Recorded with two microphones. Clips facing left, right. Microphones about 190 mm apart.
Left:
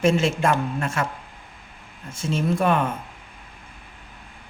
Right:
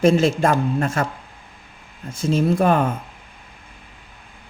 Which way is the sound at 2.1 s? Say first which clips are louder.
Right 5 dB; 35° right (ahead or behind).